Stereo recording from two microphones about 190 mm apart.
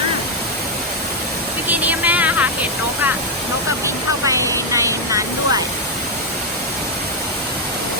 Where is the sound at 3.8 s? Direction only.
15° right (ahead or behind).